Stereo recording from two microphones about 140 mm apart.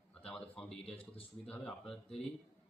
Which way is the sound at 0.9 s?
45° left (ahead or behind).